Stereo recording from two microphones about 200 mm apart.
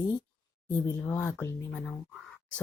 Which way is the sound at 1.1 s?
10° left (ahead or behind).